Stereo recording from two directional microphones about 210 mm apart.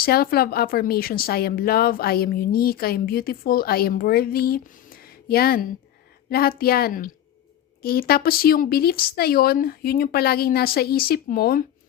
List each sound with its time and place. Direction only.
0.0 s speech: 45° left (ahead or behind)